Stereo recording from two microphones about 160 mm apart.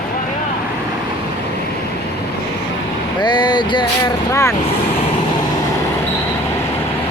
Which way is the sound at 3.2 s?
30° left (ahead or behind).